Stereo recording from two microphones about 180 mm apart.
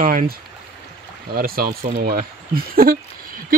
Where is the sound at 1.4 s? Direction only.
55° right (ahead or behind).